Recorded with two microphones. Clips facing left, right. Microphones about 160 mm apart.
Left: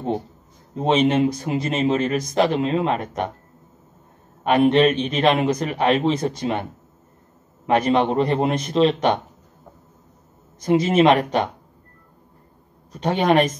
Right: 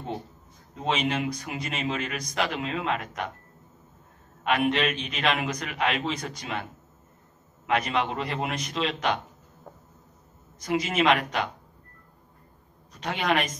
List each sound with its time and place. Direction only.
0.7 s speech: 30° left (ahead or behind)
4.4 s speech: 30° left (ahead or behind)
10.6 s speech: 30° left (ahead or behind)
13.0 s speech: 35° left (ahead or behind)